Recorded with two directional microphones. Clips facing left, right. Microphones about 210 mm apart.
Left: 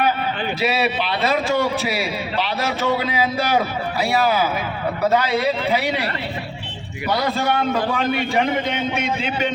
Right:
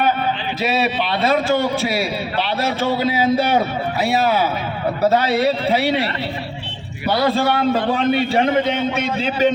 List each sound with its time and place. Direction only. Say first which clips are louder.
5.1 s a man's voice: right 2 dB; 30° right (ahead or behind)
7.1 s a man's voice: right 3 dB; 30° right (ahead or behind)